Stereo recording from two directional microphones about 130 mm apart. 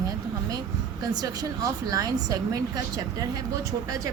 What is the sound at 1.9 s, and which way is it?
A woman's voice, 30° right (ahead or behind).